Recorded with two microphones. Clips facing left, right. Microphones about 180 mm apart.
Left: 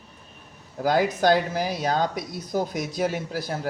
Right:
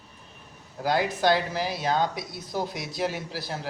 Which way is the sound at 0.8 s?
45° left (ahead or behind).